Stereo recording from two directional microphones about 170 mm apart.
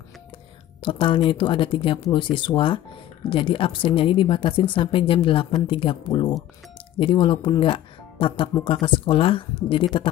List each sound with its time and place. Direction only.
0.8 s speech: 30° left (ahead or behind)